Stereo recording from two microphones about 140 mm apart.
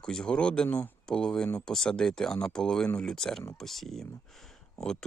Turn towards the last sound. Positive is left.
turn(degrees=5)  # may be behind; listen again after turning